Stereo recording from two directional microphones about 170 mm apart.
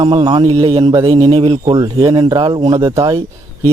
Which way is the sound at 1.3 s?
35° right (ahead or behind).